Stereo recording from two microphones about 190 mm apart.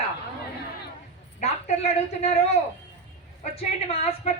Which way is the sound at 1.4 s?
35° left (ahead or behind).